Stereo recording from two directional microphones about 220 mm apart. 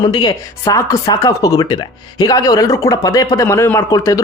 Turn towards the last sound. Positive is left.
turn(degrees=15)  # may be behind; listen again after turning